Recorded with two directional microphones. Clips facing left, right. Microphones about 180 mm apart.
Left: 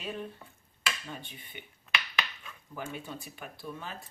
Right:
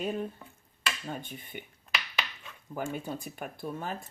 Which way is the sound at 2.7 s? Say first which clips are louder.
Right 5 dB; 45° right (ahead or behind).